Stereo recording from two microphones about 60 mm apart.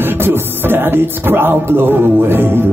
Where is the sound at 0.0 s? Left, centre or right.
Right.